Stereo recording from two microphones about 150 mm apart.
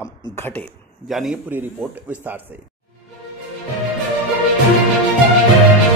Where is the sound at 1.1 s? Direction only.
Centre (ahead or behind).